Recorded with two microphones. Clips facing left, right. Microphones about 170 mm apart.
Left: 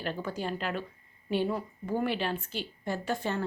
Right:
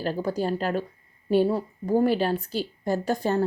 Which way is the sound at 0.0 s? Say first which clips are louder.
Right 7 dB; 35° right (ahead or behind).